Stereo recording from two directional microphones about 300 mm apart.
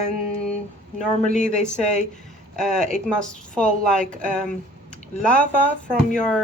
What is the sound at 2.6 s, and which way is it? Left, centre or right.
A woman's voice, centre.